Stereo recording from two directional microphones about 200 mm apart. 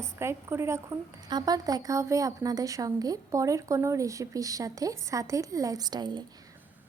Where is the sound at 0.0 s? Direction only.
15° right (ahead or behind).